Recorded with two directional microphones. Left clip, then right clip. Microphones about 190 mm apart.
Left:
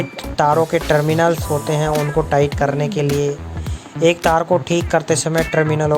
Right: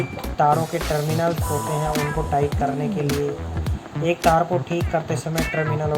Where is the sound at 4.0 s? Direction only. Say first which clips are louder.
Left 4 dB; 55° left (ahead or behind).